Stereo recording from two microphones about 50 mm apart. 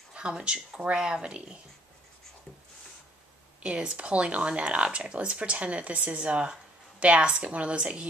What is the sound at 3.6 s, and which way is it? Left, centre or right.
Speech, right.